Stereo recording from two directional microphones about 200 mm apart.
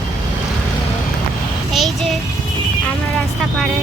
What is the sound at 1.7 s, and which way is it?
Child singing, centre (ahead or behind).